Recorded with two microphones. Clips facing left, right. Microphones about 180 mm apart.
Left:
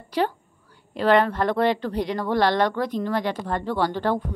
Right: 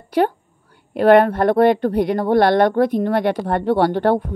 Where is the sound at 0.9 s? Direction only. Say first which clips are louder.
Right 7 dB; 55° right (ahead or behind).